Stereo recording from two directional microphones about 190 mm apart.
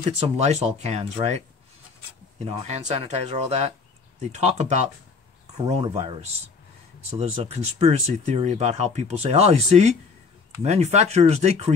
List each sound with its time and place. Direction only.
0.4 s speech: 35° right (ahead or behind)